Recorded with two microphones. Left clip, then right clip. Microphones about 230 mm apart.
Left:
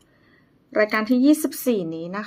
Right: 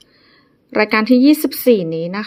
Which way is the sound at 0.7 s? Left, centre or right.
Right.